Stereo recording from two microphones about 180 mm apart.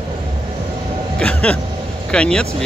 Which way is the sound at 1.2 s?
5° left (ahead or behind).